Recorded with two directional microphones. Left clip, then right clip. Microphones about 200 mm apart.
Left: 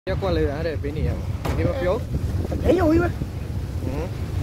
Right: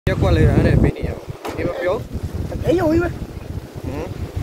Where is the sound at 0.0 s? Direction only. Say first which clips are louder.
Right 4 dB; centre (ahead or behind).